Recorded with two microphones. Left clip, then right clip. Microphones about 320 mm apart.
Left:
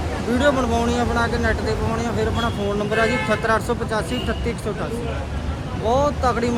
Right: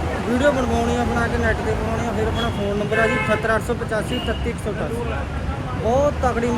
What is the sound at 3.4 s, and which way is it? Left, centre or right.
Speech, centre.